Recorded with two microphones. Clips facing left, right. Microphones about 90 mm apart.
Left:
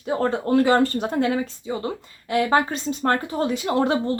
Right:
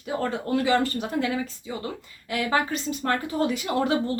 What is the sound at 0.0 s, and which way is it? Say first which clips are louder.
Speech: left 5 dB; 30° left (ahead or behind).